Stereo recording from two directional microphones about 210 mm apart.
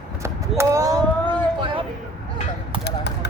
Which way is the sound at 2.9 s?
50° left (ahead or behind).